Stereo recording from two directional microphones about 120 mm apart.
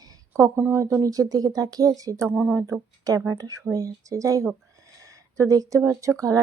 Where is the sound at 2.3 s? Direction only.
15° right (ahead or behind).